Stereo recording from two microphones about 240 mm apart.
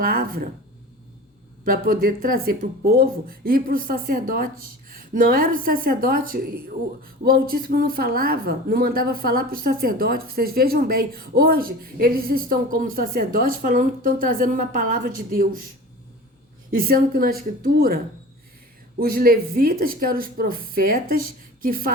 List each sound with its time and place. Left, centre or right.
0.0 s speech: right
1.6 s speech: right
16.7 s speech: right